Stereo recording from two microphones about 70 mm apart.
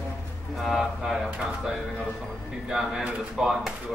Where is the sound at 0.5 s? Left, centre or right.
Centre.